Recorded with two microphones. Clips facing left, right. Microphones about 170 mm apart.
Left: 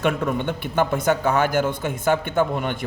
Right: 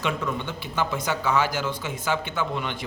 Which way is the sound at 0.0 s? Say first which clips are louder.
Left 6 dB; 55° left (ahead or behind).